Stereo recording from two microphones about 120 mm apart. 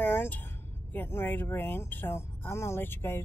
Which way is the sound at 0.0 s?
15° left (ahead or behind).